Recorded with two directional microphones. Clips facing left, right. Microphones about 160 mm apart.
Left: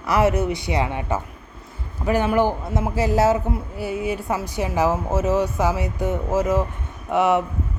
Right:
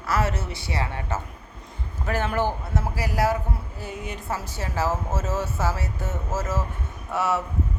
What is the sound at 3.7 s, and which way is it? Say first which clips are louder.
A woman's voice: left 9 dB; 10° left (ahead or behind).